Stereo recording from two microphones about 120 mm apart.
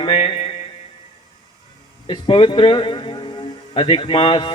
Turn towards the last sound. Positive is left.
turn(degrees=45)  # may be behind; listen again after turning